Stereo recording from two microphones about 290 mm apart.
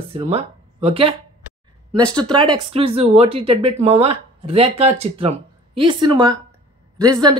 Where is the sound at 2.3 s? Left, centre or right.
Centre.